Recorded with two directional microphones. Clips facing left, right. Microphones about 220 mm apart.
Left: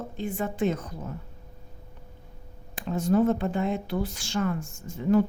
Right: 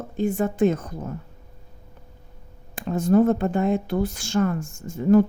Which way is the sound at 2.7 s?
50° right (ahead or behind).